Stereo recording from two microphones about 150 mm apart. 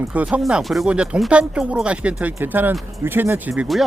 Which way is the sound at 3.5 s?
Centre (ahead or behind).